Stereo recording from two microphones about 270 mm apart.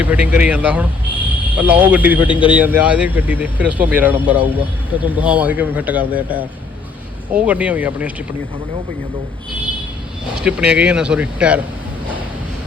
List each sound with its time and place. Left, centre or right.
0.0 s speech: centre
2.2 s speech: centre
2.6 s speech: centre
10.4 s speech: centre